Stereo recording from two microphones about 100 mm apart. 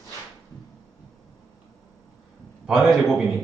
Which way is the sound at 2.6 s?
Centre (ahead or behind).